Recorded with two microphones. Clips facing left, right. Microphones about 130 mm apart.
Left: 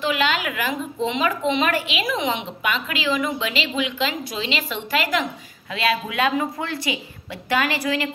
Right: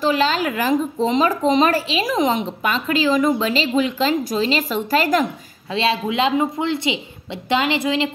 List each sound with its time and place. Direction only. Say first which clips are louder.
0.0 s a woman's voice: right 4 dB; 35° right (ahead or behind)
5.7 s a woman's voice: right 3 dB; 25° right (ahead or behind)